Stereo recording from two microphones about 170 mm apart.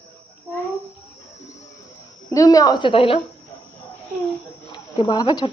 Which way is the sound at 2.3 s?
20° left (ahead or behind).